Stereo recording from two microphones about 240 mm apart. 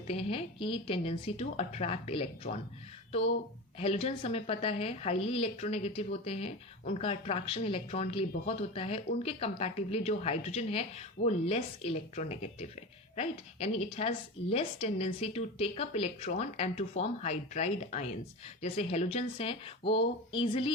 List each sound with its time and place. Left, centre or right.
0.1 s speech: left